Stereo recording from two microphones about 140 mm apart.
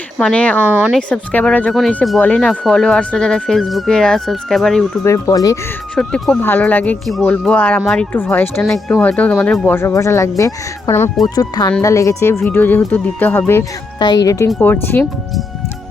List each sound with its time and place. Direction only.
0.2 s speech: 5° left (ahead or behind)
0.7 s speech: 10° right (ahead or behind)
0.9 s speech: 10° left (ahead or behind)
5.0 s speech: 20° left (ahead or behind)
6.0 s speech: 5° left (ahead or behind)
14.0 s speech: 30° left (ahead or behind)